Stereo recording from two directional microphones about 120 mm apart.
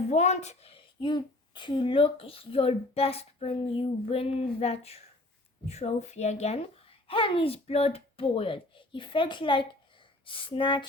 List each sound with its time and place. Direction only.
0.1 s a woman's voice: 70° left (ahead or behind)
0.9 s speech: 40° left (ahead or behind)